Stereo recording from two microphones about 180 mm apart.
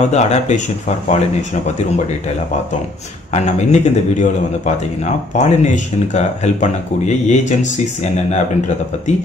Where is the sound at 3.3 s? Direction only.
40° left (ahead or behind).